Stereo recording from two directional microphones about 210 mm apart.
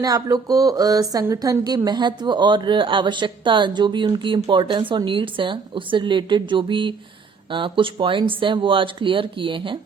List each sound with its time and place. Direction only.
0.0 s speech: 15° right (ahead or behind)